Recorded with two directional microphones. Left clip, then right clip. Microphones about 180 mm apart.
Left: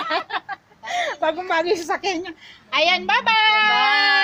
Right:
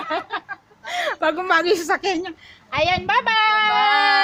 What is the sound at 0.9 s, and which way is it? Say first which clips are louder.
A woman's voice: even; 20° right (ahead or behind).